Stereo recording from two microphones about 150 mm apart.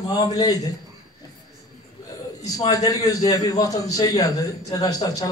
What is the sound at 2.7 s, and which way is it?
A man's voice, 25° left (ahead or behind).